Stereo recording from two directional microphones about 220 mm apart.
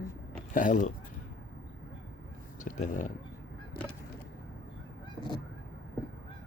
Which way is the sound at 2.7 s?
35° left (ahead or behind).